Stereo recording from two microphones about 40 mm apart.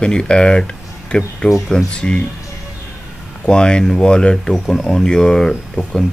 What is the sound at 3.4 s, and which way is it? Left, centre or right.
Speech, left.